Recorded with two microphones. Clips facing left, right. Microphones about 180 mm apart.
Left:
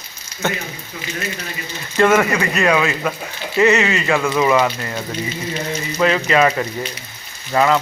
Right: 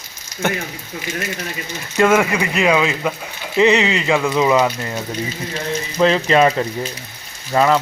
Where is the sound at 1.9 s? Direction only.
5° right (ahead or behind).